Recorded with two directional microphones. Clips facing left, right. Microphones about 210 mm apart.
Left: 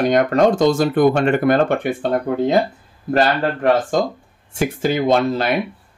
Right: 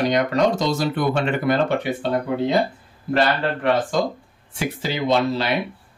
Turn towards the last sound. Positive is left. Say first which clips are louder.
# left 3 dB
turn(degrees=50)  # may be behind; listen again after turning